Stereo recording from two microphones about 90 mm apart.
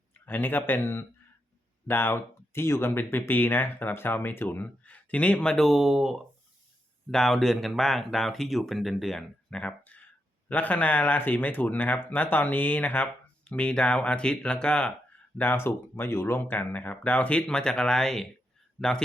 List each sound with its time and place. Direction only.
0.1 s speech: 20° left (ahead or behind)